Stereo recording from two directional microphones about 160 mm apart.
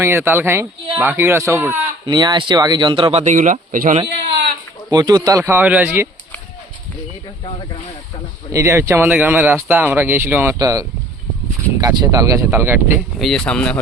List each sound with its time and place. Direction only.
0.0 s speech: 15° right (ahead or behind)
2.0 s speech: 25° right (ahead or behind); by 3.9 s 55° right (ahead or behind)
4.9 s speech: 25° right (ahead or behind)
8.5 s speech: 20° right (ahead or behind)
13.1 s speech: centre (ahead or behind)